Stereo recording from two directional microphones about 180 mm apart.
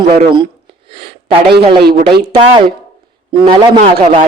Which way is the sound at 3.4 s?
25° right (ahead or behind).